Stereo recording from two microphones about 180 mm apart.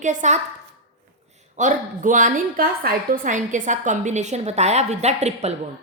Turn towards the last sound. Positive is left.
turn(degrees=-35)  # may be behind; listen again after turning